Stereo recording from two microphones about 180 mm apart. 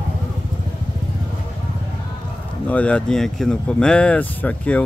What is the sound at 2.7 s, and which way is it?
Speech, 5° left (ahead or behind).